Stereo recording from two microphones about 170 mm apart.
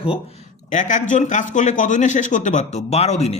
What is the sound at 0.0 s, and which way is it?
A man's voice, 35° left (ahead or behind).